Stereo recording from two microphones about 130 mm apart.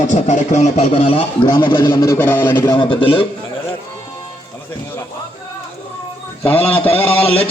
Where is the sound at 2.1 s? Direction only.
15° left (ahead or behind).